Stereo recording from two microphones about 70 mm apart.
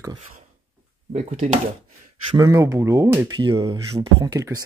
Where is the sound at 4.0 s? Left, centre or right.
Right.